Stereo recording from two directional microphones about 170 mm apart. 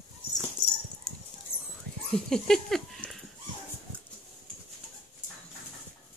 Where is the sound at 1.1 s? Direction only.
5° left (ahead or behind).